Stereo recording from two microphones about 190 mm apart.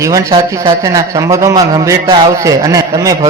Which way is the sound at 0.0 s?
15° right (ahead or behind).